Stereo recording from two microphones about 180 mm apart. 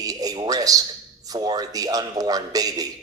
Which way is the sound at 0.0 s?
20° right (ahead or behind).